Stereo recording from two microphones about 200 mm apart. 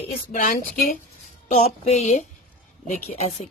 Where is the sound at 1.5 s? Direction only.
35° left (ahead or behind).